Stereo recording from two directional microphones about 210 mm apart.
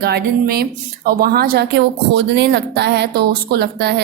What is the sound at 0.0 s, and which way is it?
A woman's voice, 50° right (ahead or behind).